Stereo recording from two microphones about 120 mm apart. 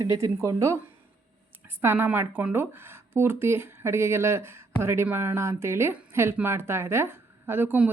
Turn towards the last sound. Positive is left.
turn(degrees=-15)  # may be behind; listen again after turning